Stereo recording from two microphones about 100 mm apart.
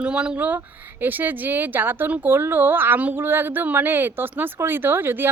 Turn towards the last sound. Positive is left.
turn(degrees=-20)  # may be behind; listen again after turning